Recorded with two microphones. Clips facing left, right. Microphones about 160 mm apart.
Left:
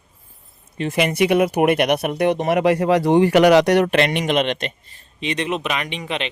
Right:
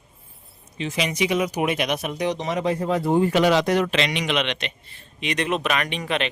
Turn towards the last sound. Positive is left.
turn(degrees=20)  # may be behind; listen again after turning